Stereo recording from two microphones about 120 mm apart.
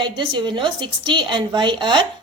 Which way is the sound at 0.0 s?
40° right (ahead or behind).